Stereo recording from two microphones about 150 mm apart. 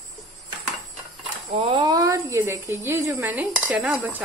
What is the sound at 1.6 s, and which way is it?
Speech, 30° right (ahead or behind).